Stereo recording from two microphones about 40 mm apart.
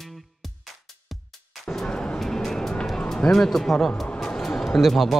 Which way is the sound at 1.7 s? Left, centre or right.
Centre.